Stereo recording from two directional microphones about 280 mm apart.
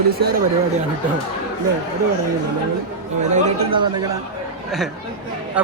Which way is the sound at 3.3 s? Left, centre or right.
Centre.